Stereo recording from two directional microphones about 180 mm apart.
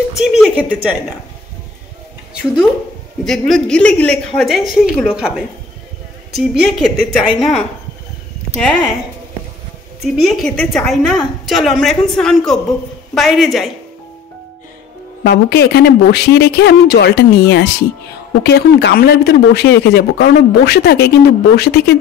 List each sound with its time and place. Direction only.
0.2 s a woman's voice: 5° right (ahead or behind)
3.3 s a woman's voice: 5° left (ahead or behind)
8.5 s a woman's voice: centre (ahead or behind)
10.0 s a woman's voice: centre (ahead or behind)
15.2 s speech: 60° left (ahead or behind)